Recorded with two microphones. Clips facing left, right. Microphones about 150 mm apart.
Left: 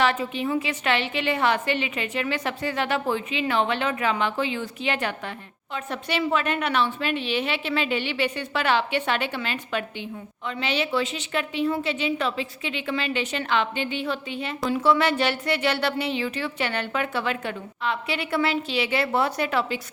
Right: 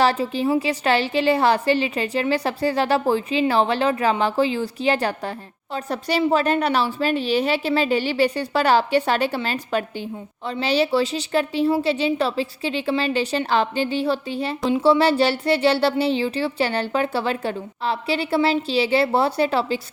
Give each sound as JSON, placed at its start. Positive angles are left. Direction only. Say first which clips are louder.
{"t": 0.0, "sound": "a woman's voice", "louder": "right 4 dB", "side_deg": -35}